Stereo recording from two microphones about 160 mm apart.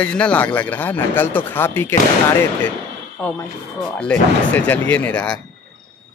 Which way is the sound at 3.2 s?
10° left (ahead or behind).